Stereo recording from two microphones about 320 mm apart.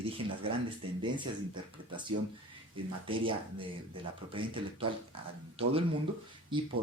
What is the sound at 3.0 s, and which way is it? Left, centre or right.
Speech, centre.